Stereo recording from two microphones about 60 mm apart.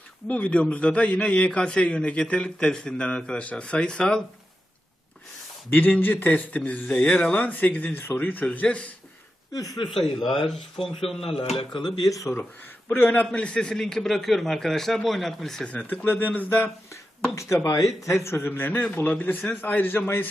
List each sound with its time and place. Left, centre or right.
0.3 s a man's voice: left
5.7 s a man's voice: left
7.3 s a man's voice: left
8.4 s a man's voice: left
9.5 s speech: left
10.2 s a man's voice: centre
12.0 s speech: left
12.9 s a man's voice: left
13.3 s a man's voice: centre
15.9 s a man's voice: left
17.3 s a man's voice: left